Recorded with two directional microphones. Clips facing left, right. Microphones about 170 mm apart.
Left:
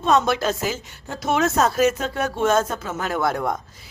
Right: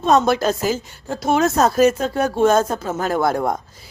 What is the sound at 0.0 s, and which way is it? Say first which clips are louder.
A woman's voice: right 3 dB; 40° right (ahead or behind).